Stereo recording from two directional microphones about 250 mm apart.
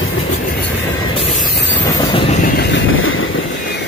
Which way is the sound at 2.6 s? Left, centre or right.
Left.